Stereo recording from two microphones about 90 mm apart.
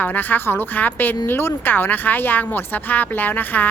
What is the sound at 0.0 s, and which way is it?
Speech, 20° left (ahead or behind).